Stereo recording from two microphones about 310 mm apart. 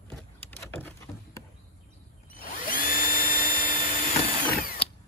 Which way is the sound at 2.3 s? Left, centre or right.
Left.